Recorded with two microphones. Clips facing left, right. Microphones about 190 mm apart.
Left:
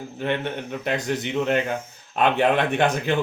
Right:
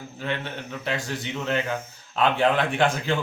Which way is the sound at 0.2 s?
55° left (ahead or behind).